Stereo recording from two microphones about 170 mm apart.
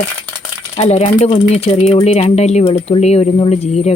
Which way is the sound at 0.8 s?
40° left (ahead or behind).